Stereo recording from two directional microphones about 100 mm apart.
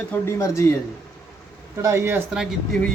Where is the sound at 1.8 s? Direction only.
25° right (ahead or behind).